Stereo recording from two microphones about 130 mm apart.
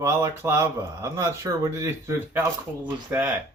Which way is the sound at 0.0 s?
20° right (ahead or behind).